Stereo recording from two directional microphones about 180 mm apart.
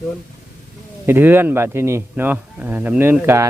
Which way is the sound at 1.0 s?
10° right (ahead or behind).